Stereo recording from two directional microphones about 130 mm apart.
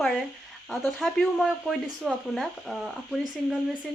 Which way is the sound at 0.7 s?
Centre (ahead or behind).